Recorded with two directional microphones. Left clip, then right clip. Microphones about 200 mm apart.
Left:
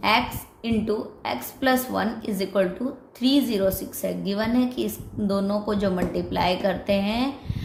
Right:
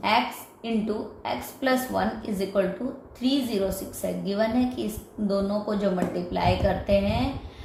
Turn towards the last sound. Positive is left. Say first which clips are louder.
# even
turn(degrees=40)  # may be behind; listen again after turning